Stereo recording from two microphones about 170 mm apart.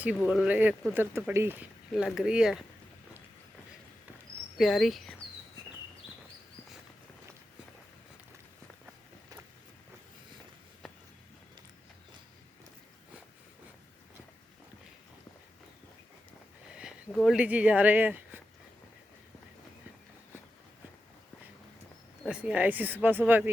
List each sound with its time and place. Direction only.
0.3 s speech: 5° right (ahead or behind)
4.5 s speech: centre (ahead or behind)
17.2 s speech: 5° right (ahead or behind)
22.2 s speech: 5° right (ahead or behind)